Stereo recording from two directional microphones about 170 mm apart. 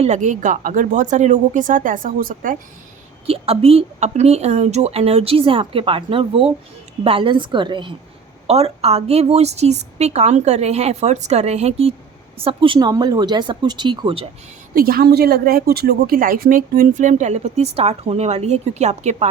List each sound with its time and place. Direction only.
0.0 s a woman's voice: 45° right (ahead or behind)
3.2 s a woman's voice: 35° right (ahead or behind)
14.8 s a woman's voice: 60° right (ahead or behind); by 19.3 s 40° right (ahead or behind)